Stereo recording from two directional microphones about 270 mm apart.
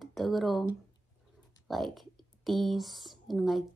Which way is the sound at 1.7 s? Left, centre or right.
Centre.